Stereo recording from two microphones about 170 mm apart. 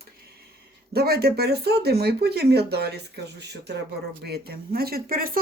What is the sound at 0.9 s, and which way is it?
Speech, 65° right (ahead or behind).